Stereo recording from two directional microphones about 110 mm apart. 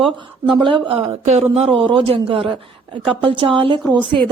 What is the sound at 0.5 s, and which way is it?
A man's voice, 45° right (ahead or behind).